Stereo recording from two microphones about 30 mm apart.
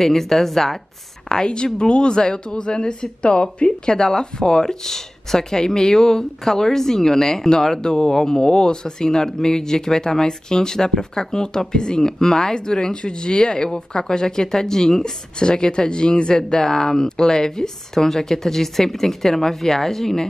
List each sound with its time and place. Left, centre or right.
0.0 s a woman's voice: centre
1.3 s a woman's voice: left
15.3 s speech: left; by 20.2 s centre